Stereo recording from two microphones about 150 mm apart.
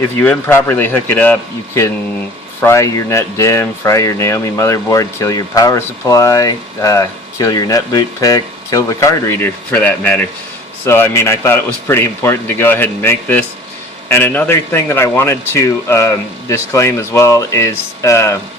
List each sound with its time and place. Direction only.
0.2 s a man's voice: 10° left (ahead or behind)